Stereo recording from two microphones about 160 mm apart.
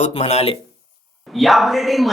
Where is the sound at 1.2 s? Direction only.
Centre (ahead or behind).